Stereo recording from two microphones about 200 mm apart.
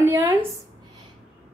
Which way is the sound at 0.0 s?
10° right (ahead or behind).